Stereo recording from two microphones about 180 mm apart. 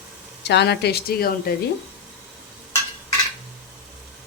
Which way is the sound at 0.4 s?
70° left (ahead or behind).